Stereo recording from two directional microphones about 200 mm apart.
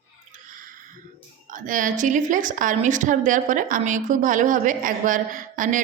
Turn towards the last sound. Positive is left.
turn(degrees=-40)  # may be behind; listen again after turning